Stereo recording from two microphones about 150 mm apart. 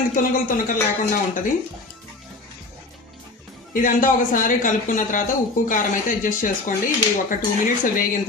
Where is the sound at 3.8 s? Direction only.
65° left (ahead or behind).